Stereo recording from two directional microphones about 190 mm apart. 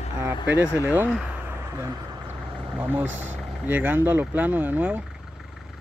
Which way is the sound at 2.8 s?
10° right (ahead or behind).